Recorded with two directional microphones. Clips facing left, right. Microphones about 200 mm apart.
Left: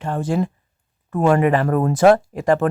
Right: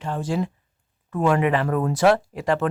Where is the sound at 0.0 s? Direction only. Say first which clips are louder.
Left 4 dB; 55° left (ahead or behind).